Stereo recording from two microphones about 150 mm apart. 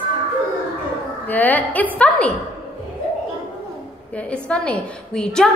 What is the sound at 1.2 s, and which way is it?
A woman's voice, 10° left (ahead or behind).